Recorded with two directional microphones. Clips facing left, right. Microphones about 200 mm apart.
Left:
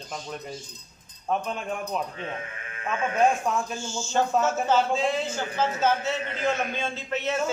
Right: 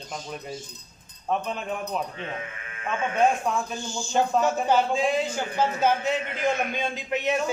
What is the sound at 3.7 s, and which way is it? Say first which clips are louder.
A man's voice: right 1 dB; 15° right (ahead or behind).